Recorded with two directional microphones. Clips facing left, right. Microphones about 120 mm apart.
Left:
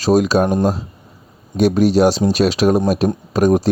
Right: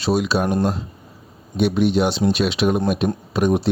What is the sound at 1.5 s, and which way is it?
Speech, 40° left (ahead or behind).